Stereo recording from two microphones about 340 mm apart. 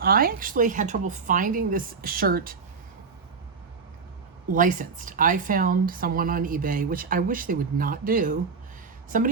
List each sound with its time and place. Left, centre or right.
0.0 s a woman's voice: right
4.5 s a woman's voice: right